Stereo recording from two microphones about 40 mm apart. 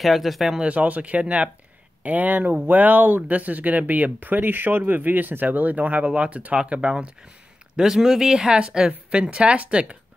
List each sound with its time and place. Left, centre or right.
0.0 s speech: centre
0.6 s speech: right
2.0 s a woman's voice: right
7.8 s a woman's voice: centre; by 9.9 s right